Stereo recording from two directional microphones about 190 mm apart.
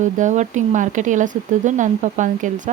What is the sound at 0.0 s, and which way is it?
Speech, 40° right (ahead or behind).